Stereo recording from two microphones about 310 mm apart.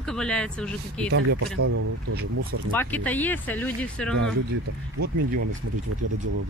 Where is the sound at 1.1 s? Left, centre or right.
Right.